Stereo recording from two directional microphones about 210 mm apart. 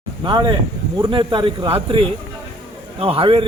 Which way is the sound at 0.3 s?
20° right (ahead or behind).